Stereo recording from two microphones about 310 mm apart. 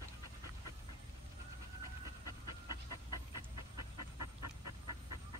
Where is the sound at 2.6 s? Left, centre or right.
Right.